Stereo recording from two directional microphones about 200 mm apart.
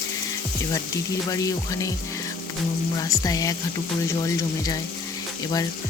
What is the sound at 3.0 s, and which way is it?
Speech, 15° left (ahead or behind).